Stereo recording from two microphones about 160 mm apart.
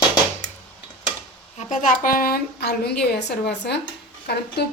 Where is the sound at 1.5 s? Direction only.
50° left (ahead or behind).